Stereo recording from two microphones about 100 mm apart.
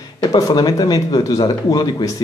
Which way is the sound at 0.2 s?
45° left (ahead or behind).